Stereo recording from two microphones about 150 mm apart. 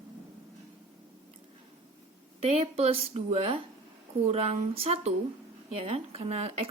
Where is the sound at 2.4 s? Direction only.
45° right (ahead or behind).